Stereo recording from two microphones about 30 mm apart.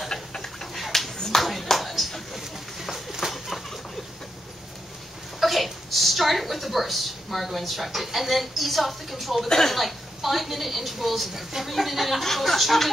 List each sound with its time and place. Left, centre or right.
0.1 s a sound: centre
1.1 s clapping: centre
1.4 s clapping: centre
1.7 s bird: centre
3.4 s bird flight: centre
5.4 s a sound: centre
9.5 s speech: centre
9.8 s a woman's voice: centre